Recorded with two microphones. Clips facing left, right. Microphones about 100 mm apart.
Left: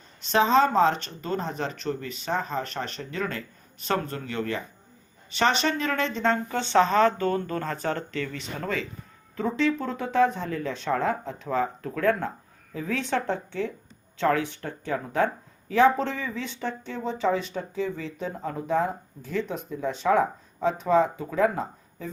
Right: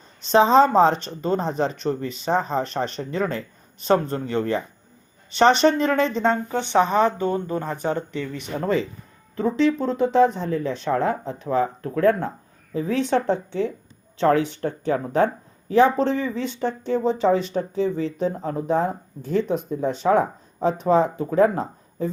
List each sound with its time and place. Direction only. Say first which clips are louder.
0.3 s speech: right 5 dB; 25° right (ahead or behind)
8.6 s speech: right 8 dB; 25° right (ahead or behind)